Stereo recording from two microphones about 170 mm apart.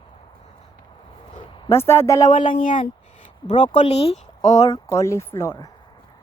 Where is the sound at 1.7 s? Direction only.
15° left (ahead or behind).